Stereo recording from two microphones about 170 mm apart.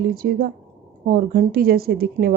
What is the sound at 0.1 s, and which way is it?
Speech, 55° right (ahead or behind).